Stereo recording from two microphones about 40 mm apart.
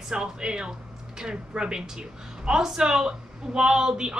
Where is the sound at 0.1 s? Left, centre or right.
Centre.